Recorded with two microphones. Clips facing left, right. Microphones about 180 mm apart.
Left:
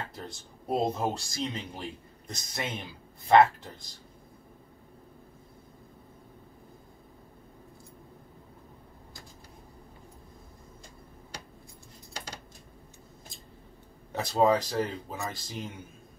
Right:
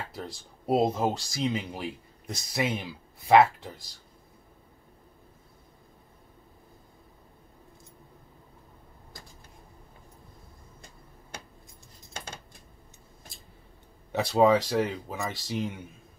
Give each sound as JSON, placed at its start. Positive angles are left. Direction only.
{"t": 0.1, "sound": "speech", "side_deg": -5}
{"t": 14.1, "sound": "speech", "side_deg": -5}